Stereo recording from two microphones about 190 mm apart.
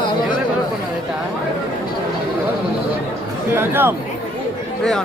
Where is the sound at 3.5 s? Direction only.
10° right (ahead or behind).